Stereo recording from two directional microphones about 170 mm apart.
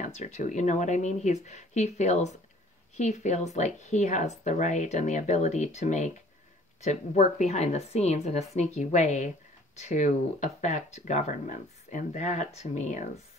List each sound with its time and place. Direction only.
0.0 s a woman's voice: 45° left (ahead or behind)